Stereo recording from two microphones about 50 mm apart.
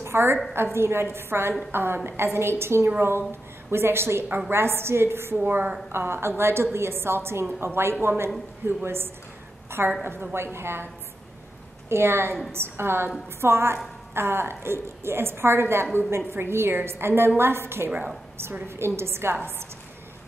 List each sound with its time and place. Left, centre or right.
0.0 s a woman's voice: right
5.4 s a woman's voice: right
5.9 s a woman's voice: right
11.9 s a woman's voice: right